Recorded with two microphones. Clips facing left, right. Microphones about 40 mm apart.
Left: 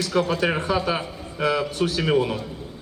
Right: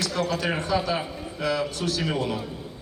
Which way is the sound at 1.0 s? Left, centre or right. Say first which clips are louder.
Right 1 dB; centre.